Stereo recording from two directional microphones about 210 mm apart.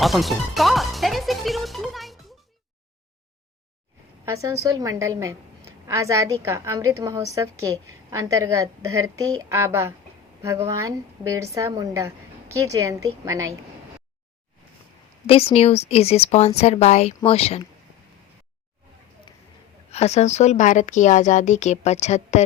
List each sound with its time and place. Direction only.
0.0 s music: centre (ahead or behind)
4.3 s a woman's voice: 15° right (ahead or behind)
15.3 s speech: 30° left (ahead or behind)
19.9 s speech: 30° left (ahead or behind)